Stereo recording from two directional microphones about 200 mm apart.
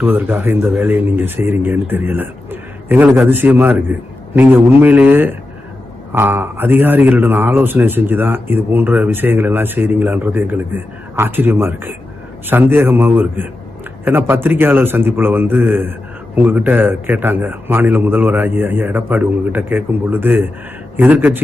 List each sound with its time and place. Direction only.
0.0 s a man's voice: 10° right (ahead or behind)